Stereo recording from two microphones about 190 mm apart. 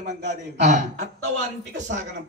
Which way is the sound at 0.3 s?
40° right (ahead or behind).